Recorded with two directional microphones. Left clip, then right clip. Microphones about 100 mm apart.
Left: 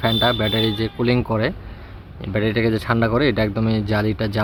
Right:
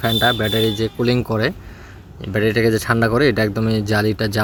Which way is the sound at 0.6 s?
30° right (ahead or behind).